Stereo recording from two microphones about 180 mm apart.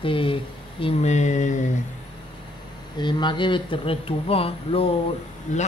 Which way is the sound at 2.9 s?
25° left (ahead or behind).